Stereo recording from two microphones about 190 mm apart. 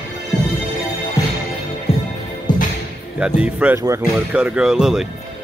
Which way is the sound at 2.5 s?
20° left (ahead or behind).